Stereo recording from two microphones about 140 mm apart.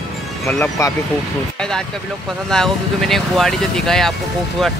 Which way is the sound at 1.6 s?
5° left (ahead or behind).